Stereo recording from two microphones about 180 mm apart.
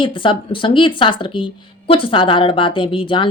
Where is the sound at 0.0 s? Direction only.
30° left (ahead or behind).